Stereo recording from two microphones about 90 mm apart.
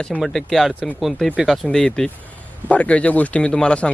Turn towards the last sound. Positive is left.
turn(degrees=10)  # may be behind; listen again after turning